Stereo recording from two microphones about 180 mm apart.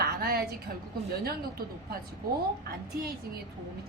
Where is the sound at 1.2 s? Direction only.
55° right (ahead or behind).